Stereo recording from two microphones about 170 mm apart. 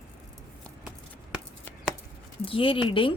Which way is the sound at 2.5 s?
30° left (ahead or behind).